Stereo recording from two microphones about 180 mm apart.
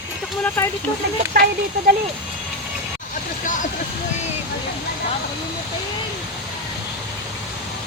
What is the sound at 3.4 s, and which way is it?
Speech, 45° left (ahead or behind).